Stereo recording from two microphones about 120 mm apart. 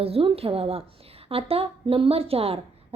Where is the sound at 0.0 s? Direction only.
50° right (ahead or behind).